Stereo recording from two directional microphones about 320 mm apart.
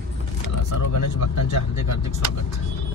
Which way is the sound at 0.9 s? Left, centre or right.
Left.